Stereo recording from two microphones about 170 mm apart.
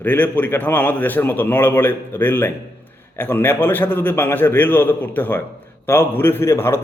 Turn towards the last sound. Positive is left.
turn(degrees=15)  # may be behind; listen again after turning